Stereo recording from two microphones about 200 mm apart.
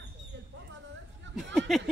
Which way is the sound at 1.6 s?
Centre (ahead or behind).